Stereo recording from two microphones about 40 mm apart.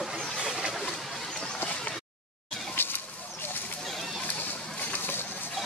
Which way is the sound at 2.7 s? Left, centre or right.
Left.